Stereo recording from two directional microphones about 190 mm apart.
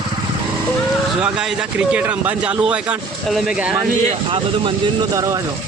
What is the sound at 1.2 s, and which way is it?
Speech, 5° right (ahead or behind).